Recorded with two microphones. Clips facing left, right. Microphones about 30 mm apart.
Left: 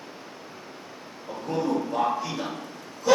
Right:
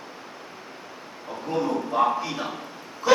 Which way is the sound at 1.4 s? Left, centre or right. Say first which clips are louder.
Right 1 dB; centre.